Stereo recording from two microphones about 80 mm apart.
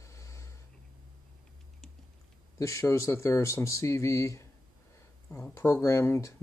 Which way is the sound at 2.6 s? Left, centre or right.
Left.